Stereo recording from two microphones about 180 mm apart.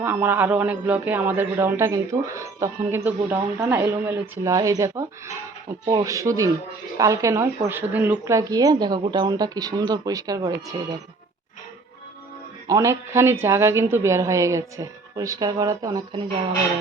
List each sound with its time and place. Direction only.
0.0 s a woman's voice: 10° right (ahead or behind)
12.6 s a woman's voice: 15° right (ahead or behind)